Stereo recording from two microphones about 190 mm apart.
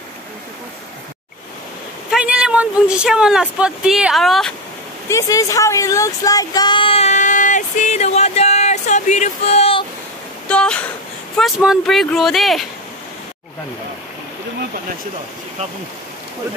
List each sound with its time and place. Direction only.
2.0 s speech: 5° right (ahead or behind)
5.1 s a sound: 15° left (ahead or behind)
10.5 s speech: 5° left (ahead or behind)